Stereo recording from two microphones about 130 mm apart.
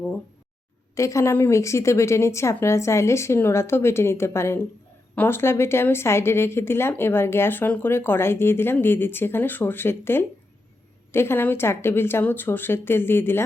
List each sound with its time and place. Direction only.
0.9 s a woman's voice: 25° left (ahead or behind)